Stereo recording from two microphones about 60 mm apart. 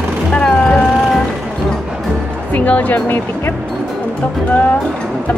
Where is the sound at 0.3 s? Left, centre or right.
Centre.